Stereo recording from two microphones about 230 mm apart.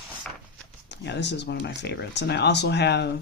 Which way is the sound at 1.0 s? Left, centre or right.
Left.